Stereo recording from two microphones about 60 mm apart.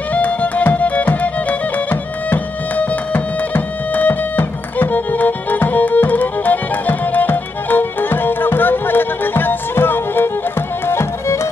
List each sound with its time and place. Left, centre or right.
0.1 s music: left
10.9 s music: left